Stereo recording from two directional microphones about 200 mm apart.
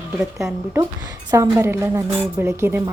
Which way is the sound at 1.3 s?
15° right (ahead or behind).